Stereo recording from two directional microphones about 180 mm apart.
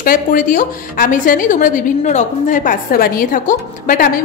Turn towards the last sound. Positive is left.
turn(degrees=50)  # may be behind; listen again after turning